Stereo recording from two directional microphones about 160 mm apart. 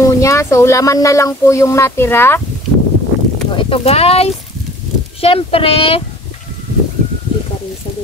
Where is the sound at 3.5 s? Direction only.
35° left (ahead or behind).